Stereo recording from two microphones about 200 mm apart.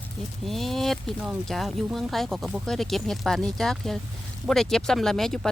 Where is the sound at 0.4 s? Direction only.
Centre (ahead or behind).